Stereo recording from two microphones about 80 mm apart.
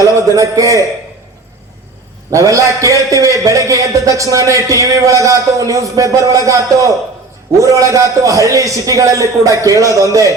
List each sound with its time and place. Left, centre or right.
0.0 s a man's voice: right
2.3 s a man's voice: right